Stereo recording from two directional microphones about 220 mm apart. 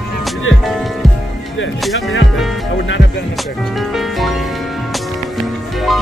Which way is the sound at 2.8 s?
55° left (ahead or behind).